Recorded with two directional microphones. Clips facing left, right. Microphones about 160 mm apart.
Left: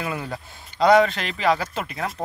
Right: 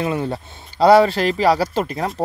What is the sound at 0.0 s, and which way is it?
Speech, 30° right (ahead or behind).